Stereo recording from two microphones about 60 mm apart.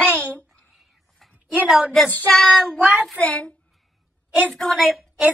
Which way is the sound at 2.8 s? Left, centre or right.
Centre.